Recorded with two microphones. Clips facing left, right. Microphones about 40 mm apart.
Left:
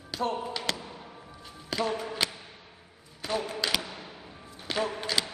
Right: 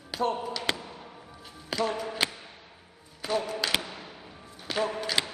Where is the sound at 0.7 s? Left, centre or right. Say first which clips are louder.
Right 3 dB; right.